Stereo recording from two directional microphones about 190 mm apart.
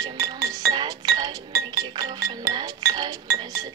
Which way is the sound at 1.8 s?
20° right (ahead or behind).